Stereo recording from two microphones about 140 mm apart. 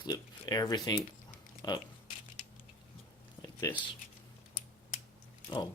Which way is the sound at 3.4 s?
25° left (ahead or behind).